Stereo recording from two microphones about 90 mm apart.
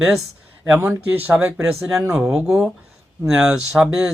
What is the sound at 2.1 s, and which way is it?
Speech, 5° right (ahead or behind).